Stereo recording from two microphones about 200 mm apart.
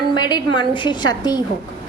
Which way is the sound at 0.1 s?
20° left (ahead or behind).